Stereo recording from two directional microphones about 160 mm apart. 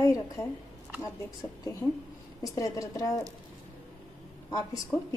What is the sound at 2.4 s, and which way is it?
Speech, 20° left (ahead or behind).